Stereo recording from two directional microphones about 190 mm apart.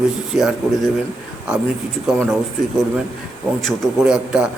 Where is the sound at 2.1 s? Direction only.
Centre (ahead or behind).